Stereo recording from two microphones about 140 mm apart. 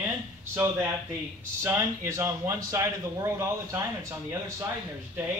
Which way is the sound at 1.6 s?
20° right (ahead or behind).